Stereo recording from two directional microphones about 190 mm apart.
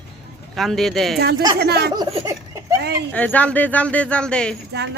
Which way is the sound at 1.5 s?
60° right (ahead or behind).